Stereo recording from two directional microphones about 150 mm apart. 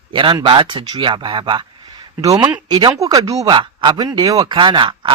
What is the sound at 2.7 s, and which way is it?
Speech, 25° right (ahead or behind).